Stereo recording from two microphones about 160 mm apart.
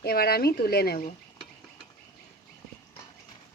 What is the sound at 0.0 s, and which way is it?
Speech, 70° left (ahead or behind).